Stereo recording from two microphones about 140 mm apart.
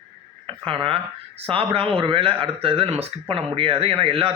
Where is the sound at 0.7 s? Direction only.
40° right (ahead or behind).